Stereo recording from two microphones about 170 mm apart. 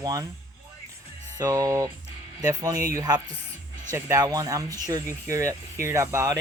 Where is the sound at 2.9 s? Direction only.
20° right (ahead or behind).